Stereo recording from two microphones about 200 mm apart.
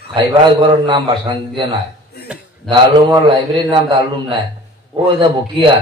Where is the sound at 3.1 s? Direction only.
20° right (ahead or behind).